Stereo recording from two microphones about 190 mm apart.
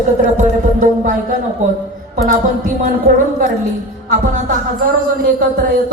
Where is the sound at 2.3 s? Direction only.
45° right (ahead or behind).